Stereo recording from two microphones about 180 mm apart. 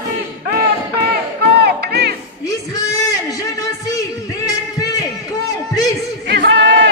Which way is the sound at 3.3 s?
20° left (ahead or behind).